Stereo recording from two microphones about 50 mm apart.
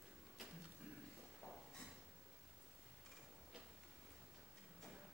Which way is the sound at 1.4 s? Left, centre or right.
Left.